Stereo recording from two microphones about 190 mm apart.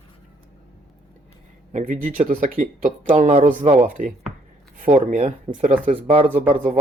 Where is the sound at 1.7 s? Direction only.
45° right (ahead or behind).